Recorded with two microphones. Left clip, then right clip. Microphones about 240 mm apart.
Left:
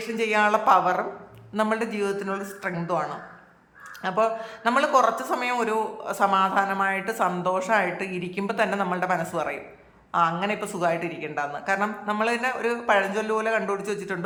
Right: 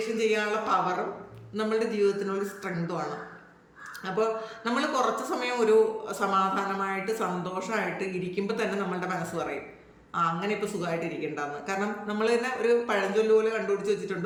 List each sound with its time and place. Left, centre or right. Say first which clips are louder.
0.2 s a man's voice: left 7 dB; centre